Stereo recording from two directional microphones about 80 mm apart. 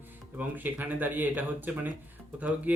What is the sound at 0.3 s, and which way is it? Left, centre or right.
Speech, right.